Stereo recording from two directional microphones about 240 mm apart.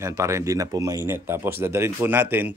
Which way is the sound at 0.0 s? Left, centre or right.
Centre.